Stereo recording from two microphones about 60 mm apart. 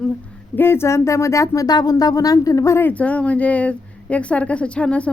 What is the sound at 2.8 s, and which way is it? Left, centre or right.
A woman's voice, left.